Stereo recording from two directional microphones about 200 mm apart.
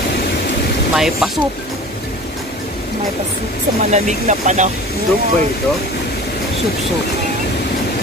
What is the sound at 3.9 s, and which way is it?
Speech, 35° right (ahead or behind).